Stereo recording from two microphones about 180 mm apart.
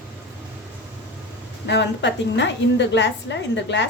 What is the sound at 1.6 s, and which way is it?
A woman's voice, 75° left (ahead or behind).